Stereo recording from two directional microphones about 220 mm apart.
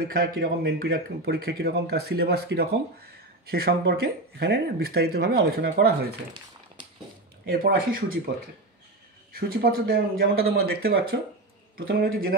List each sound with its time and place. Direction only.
0.1 s a man's voice: 45° right (ahead or behind)
7.4 s speech: 40° right (ahead or behind)
9.5 s a man's voice: 45° right (ahead or behind)